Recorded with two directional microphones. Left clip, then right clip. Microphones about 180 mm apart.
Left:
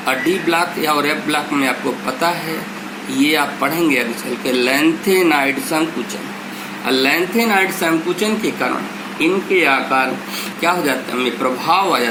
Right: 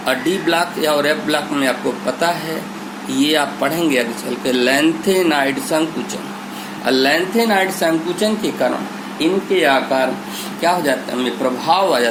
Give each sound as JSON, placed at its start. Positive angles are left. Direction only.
{"t": 0.0, "sound": "a man's voice", "side_deg": -40}
{"t": 3.2, "sound": "a man's voice", "side_deg": -40}
{"t": 6.8, "sound": "a man's voice", "side_deg": -40}